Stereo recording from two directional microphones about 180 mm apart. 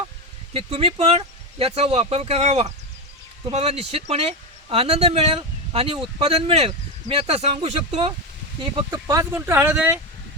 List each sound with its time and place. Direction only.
0.5 s speech: 30° right (ahead or behind); by 10.0 s 10° right (ahead or behind)